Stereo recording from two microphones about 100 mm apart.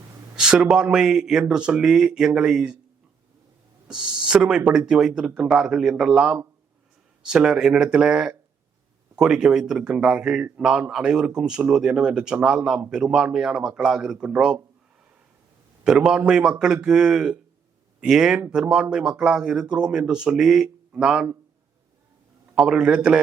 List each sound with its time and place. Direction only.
0.3 s a man's voice: 5° right (ahead or behind)
3.8 s a man's voice: 10° right (ahead or behind)
15.8 s a man's voice: 10° right (ahead or behind)
22.5 s a man's voice: 5° right (ahead or behind)